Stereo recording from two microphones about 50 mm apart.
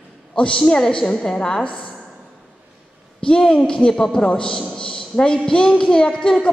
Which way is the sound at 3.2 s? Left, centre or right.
Centre.